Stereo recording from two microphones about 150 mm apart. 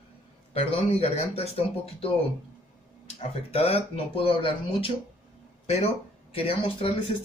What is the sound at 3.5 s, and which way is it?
Speech, 40° left (ahead or behind).